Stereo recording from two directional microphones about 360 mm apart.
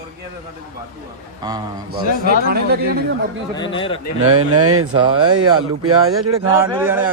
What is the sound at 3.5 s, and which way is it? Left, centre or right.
Speech, centre.